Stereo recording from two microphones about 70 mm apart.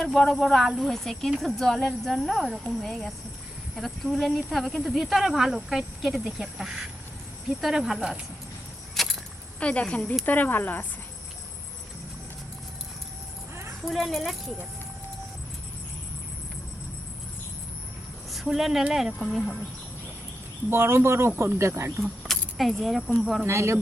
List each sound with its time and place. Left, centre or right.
0.0 s speech: centre
9.0 s vehicle: centre
9.6 s speech: centre
13.8 s speech: centre
18.3 s speech: centre
20.7 s speech: right
22.0 s speech: centre
23.5 s speech: right